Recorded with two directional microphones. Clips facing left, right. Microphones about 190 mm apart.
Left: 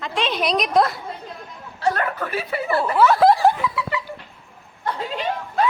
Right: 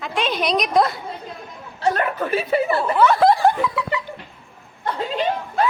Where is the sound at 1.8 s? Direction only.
20° right (ahead or behind).